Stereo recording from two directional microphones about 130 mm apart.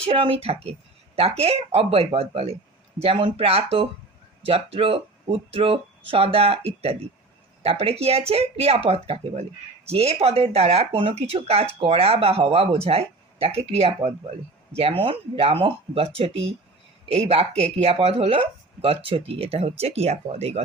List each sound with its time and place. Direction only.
0.0 s speech: 45° right (ahead or behind)